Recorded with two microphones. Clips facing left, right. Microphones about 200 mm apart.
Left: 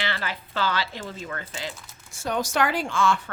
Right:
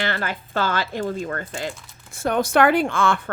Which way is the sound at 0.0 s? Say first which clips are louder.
Right 5 dB; 50° right (ahead or behind).